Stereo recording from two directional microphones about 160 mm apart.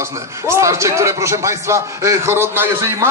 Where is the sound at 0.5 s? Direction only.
15° right (ahead or behind).